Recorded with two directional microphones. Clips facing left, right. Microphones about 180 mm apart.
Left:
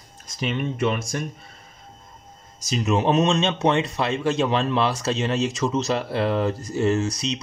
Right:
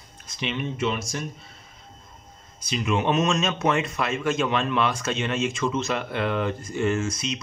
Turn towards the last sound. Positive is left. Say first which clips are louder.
# left 3 dB
turn(degrees=35)  # may be behind; listen again after turning